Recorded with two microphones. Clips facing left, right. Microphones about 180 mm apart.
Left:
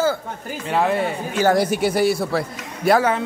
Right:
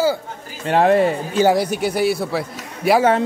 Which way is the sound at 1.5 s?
Centre (ahead or behind).